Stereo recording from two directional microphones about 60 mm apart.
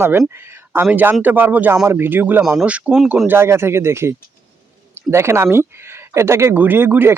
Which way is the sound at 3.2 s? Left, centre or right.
Right.